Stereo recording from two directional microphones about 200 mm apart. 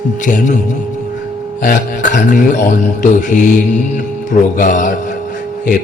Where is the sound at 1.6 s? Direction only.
40° left (ahead or behind).